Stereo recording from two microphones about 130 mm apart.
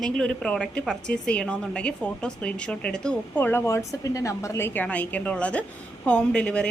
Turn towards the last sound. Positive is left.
turn(degrees=10)  # may be behind; listen again after turning